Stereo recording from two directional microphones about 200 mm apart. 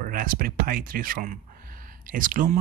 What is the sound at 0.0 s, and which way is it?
Speech, 45° right (ahead or behind).